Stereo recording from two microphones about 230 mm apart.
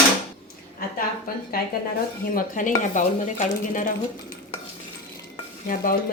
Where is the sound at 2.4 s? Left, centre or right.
Left.